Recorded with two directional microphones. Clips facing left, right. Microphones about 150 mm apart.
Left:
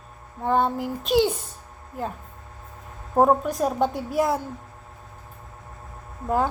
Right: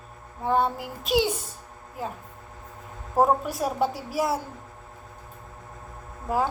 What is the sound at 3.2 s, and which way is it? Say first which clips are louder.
A woman's voice: left 3 dB; 5° right (ahead or behind).